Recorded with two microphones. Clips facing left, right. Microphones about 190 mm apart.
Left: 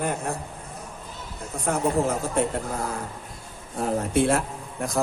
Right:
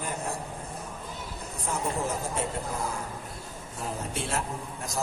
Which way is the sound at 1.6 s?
65° left (ahead or behind).